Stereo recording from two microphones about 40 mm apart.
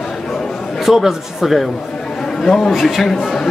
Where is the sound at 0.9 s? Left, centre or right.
Centre.